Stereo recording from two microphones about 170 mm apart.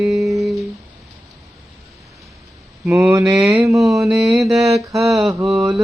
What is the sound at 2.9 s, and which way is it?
Speech, 15° right (ahead or behind).